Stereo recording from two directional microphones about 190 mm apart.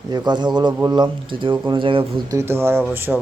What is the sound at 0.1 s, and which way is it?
Speech, 20° right (ahead or behind).